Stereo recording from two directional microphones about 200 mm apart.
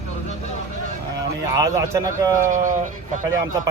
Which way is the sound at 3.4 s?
15° right (ahead or behind).